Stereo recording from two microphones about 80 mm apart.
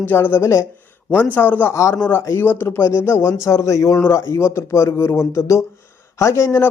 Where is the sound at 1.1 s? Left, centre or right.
Centre.